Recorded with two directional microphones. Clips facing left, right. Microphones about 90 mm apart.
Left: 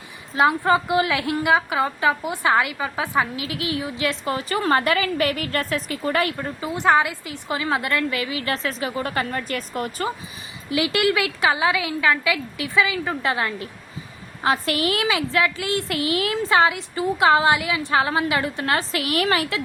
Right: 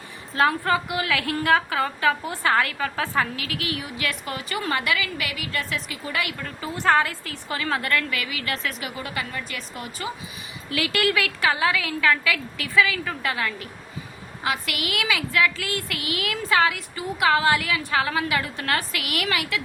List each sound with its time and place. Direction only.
0.3 s a woman's voice: 20° left (ahead or behind); by 6.3 s 40° left (ahead or behind)
6.3 s a woman's voice: 25° left (ahead or behind)
9.0 s a woman's voice: 45° left (ahead or behind)
10.7 s a woman's voice: 20° left (ahead or behind)